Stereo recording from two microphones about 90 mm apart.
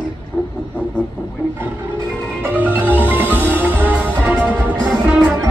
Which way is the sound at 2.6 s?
20° right (ahead or behind).